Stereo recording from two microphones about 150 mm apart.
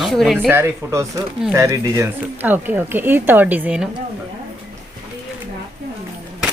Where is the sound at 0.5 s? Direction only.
15° right (ahead or behind).